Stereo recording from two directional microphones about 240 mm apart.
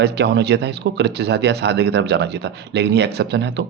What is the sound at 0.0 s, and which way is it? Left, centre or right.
Speech, right.